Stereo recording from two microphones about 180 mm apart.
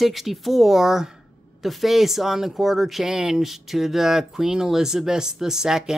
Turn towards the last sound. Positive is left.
turn(degrees=-5)  # may be behind; listen again after turning